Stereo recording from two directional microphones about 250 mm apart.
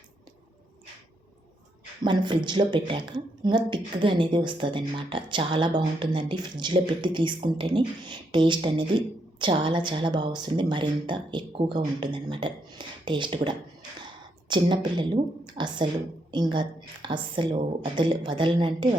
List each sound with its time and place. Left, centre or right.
2.0 s speech: centre